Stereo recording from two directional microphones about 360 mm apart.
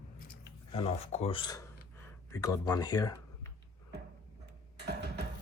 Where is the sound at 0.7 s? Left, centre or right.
Centre.